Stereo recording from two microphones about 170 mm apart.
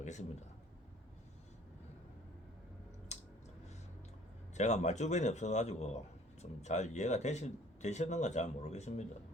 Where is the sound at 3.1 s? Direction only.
40° left (ahead or behind).